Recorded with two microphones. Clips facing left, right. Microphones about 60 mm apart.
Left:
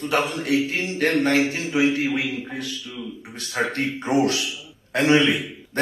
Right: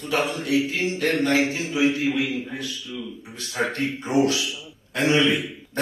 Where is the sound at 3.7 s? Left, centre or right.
Left.